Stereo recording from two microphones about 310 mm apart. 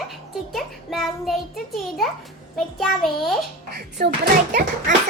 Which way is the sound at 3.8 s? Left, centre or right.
Right.